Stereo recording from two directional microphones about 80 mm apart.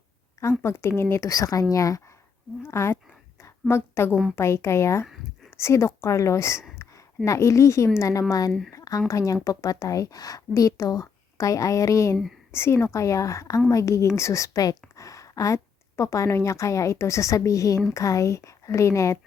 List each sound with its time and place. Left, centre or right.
0.6 s speech: left
1.3 s a woman's voice: left
2.6 s speech: left
3.4 s a sound: left
4.1 s a woman's voice: centre
4.4 s speech: left
6.8 s a sound: left
7.3 s a woman's voice: left